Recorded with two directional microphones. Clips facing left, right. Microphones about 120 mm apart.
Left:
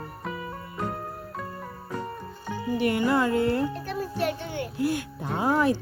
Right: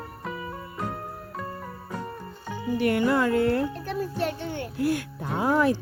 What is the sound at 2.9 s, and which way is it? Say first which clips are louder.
Music: right 1 dB; 10° left (ahead or behind).